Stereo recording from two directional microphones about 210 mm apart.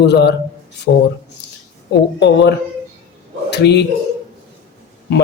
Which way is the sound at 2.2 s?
55° left (ahead or behind).